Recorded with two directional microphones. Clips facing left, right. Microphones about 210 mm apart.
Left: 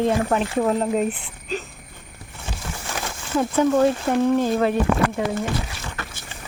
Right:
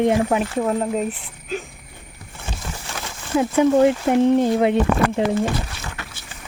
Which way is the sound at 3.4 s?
15° right (ahead or behind).